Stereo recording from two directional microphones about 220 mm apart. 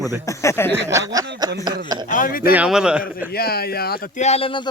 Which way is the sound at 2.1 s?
40° left (ahead or behind).